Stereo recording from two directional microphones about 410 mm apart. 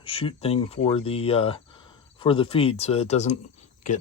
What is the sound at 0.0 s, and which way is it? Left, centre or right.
Speech, centre.